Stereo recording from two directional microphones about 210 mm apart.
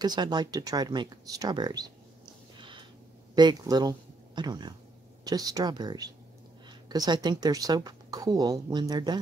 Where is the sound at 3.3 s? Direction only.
20° right (ahead or behind).